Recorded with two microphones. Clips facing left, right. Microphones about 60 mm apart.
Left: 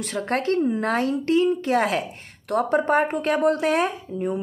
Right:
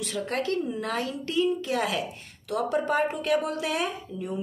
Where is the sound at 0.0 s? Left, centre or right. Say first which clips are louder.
Left 5 dB; left.